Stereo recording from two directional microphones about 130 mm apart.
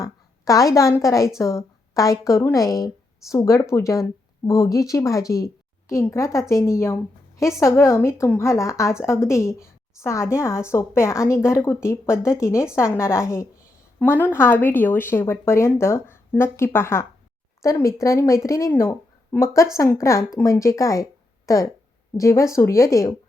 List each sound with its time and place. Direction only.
0.0 s a woman's voice: 25° left (ahead or behind)